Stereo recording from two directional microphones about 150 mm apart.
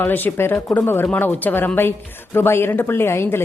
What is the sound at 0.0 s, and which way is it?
A woman's voice, 10° left (ahead or behind).